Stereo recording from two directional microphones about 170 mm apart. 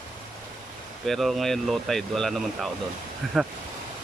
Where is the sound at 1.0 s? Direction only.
Centre (ahead or behind).